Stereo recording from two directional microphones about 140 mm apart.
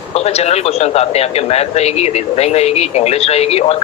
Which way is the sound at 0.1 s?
50° left (ahead or behind).